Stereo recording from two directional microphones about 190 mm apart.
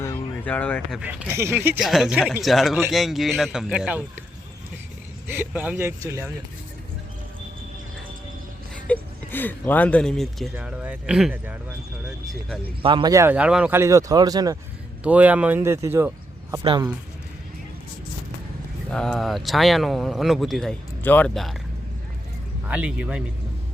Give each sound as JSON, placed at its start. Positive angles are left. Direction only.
{"t": 0.0, "sound": "a sound", "side_deg": 10}
{"t": 0.9, "sound": "a man's voice", "side_deg": -5}
{"t": 1.8, "sound": "speech", "side_deg": 0}
{"t": 5.3, "sound": "a man's voice", "side_deg": -10}
{"t": 8.9, "sound": "speech", "side_deg": 10}
{"t": 12.8, "sound": "a man's voice", "side_deg": -25}
{"t": 15.0, "sound": "speech", "side_deg": -10}
{"t": 16.6, "sound": "speech", "side_deg": -25}
{"t": 18.9, "sound": "speech", "side_deg": 5}
{"t": 22.7, "sound": "speech", "side_deg": -5}